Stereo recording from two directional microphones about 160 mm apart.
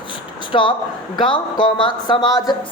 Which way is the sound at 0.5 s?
30° left (ahead or behind).